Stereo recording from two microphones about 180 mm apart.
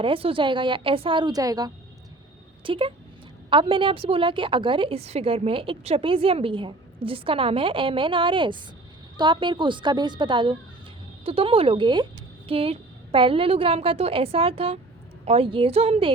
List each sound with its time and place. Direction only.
0.0 s a woman's voice: 30° right (ahead or behind)